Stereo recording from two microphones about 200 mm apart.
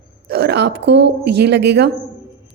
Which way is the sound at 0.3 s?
55° right (ahead or behind).